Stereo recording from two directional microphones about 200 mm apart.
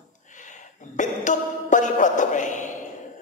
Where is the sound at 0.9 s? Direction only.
40° left (ahead or behind).